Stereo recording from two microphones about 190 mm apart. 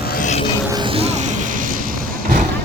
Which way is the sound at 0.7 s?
25° right (ahead or behind).